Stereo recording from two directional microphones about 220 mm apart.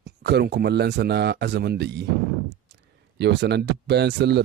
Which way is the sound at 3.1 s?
50° right (ahead or behind).